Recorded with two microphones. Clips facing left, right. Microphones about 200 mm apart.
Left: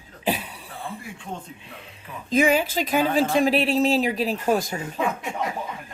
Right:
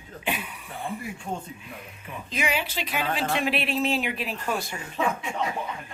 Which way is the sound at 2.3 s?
45° left (ahead or behind).